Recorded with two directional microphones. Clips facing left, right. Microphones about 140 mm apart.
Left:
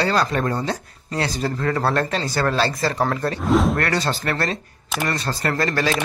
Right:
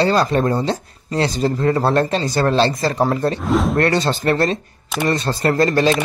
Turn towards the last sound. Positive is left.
turn(degrees=-25)  # may be behind; listen again after turning